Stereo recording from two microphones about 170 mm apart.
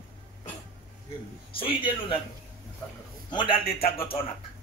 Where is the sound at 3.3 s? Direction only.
30° left (ahead or behind).